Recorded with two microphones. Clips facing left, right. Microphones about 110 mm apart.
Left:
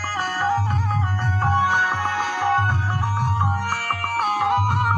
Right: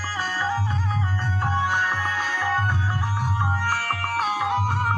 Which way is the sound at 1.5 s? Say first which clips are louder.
Left 4 dB; 70° left (ahead or behind).